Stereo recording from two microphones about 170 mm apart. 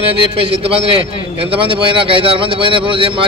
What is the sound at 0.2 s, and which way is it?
A man's voice, 35° right (ahead or behind).